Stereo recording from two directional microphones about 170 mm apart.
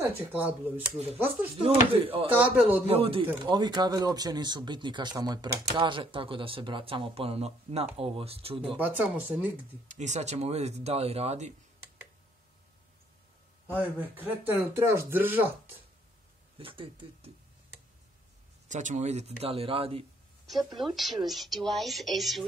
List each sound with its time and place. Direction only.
0.0 s speech: 10° right (ahead or behind)
1.6 s speech: 35° right (ahead or behind)
2.3 s speech: 10° right (ahead or behind)
2.9 s speech: 35° right (ahead or behind)
8.7 s speech: 10° right (ahead or behind)
9.8 s speech: 45° right (ahead or behind)
13.7 s speech: 10° right (ahead or behind)
16.5 s speech: 30° right (ahead or behind)
18.7 s speech: 45° right (ahead or behind)
20.8 s a woman's voice: centre (ahead or behind)